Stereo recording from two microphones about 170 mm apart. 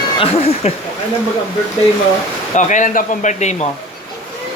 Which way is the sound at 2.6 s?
45° left (ahead or behind).